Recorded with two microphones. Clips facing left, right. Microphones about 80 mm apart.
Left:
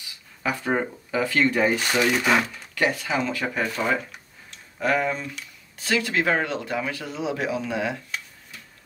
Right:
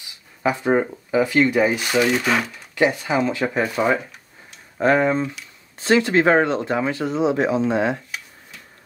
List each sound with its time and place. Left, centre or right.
0.0 s speech: right; by 2.5 s centre
2.5 s speech: centre
4.7 s speech: right